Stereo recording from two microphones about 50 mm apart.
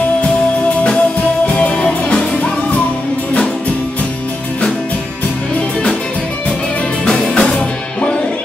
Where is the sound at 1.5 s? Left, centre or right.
Left.